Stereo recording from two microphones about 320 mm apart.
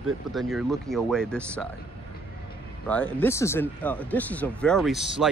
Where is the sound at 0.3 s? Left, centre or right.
Centre.